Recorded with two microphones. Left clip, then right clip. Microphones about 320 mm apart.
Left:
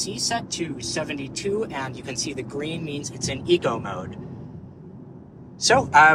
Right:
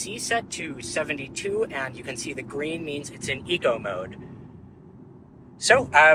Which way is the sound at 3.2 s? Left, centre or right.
Centre.